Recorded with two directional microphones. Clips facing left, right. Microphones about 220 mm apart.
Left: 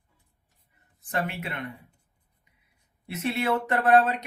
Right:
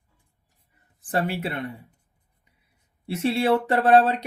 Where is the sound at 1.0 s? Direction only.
35° right (ahead or behind).